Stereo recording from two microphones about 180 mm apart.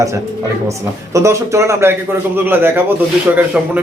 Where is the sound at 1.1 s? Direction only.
15° right (ahead or behind).